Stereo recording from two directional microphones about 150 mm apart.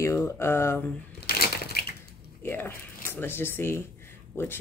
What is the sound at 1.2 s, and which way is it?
Crushing, 90° left.